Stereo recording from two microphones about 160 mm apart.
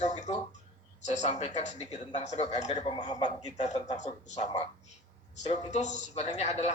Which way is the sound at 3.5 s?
45° left (ahead or behind).